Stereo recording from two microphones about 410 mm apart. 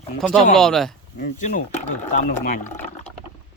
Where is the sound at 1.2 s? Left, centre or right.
Centre.